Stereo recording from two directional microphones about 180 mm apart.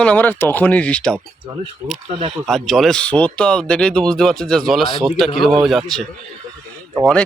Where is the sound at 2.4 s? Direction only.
Centre (ahead or behind).